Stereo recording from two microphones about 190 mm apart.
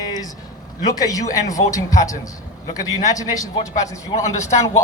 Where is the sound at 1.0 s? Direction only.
20° left (ahead or behind).